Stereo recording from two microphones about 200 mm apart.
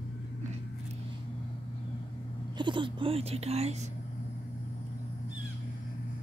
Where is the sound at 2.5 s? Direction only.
25° right (ahead or behind).